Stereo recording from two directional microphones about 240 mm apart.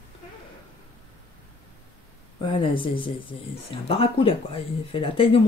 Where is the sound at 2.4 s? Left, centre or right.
Left.